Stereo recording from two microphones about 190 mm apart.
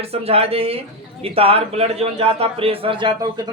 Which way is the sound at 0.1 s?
30° right (ahead or behind).